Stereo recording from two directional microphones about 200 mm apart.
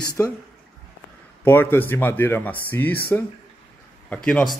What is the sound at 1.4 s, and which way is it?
Speech, 10° left (ahead or behind).